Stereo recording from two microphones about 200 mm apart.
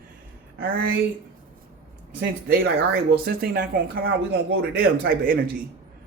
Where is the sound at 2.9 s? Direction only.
50° right (ahead or behind).